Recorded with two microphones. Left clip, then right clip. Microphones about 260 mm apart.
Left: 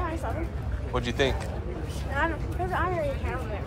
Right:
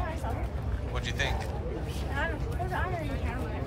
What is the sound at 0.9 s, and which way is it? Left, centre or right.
Speech, centre.